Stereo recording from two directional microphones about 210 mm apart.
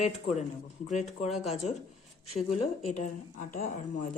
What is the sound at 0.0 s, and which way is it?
Speech, 30° left (ahead or behind).